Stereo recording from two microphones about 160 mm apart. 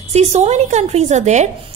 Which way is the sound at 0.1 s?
45° right (ahead or behind).